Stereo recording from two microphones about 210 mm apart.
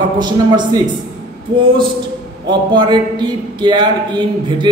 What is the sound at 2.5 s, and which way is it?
A man's voice, 20° right (ahead or behind).